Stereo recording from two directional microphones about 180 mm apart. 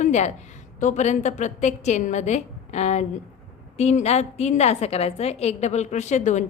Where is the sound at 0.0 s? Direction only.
40° left (ahead or behind).